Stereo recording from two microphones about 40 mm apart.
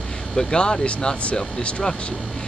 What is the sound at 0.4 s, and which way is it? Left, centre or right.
Speech, left.